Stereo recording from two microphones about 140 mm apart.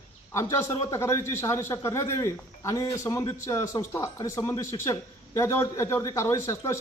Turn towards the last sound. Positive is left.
turn(degrees=20)  # may be behind; listen again after turning